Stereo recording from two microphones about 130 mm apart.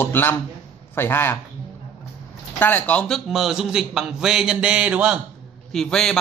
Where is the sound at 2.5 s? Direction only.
15° left (ahead or behind).